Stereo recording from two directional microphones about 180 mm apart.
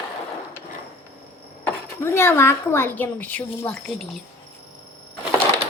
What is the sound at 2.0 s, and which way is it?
A woman's voice, 15° left (ahead or behind).